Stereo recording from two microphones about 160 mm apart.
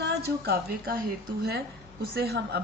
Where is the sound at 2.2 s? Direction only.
85° right.